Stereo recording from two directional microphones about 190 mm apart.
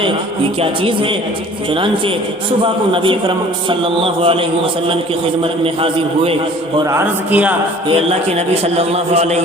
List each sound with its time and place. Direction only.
0.6 s a man's voice: 25° right (ahead or behind)
6.9 s a man's voice: 10° right (ahead or behind)
7.9 s a man's voice: 35° right (ahead or behind)